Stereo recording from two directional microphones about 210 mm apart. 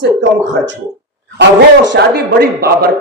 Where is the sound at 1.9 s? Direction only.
50° right (ahead or behind).